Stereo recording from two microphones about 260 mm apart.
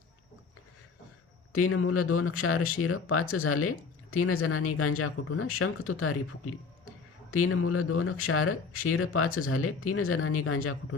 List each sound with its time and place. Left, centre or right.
1.5 s speech: left